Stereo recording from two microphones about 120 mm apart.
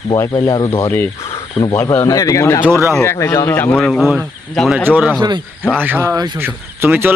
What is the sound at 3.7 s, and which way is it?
Speech, 5° left (ahead or behind).